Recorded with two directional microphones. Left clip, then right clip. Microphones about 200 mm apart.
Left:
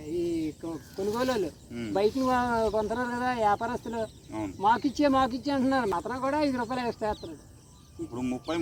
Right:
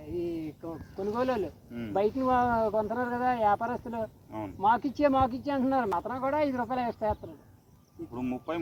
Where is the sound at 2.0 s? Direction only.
10° right (ahead or behind).